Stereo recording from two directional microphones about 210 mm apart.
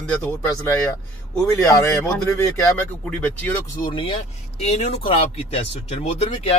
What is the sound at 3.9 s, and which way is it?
Speech, 25° left (ahead or behind).